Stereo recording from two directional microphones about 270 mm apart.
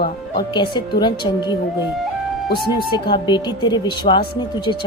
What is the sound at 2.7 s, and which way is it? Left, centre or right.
Speech, centre.